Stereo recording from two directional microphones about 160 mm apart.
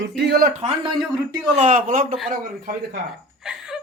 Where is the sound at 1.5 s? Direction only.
50° right (ahead or behind).